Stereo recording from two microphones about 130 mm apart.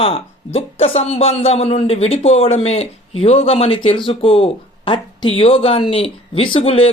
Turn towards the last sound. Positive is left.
turn(degrees=45)  # may be behind; listen again after turning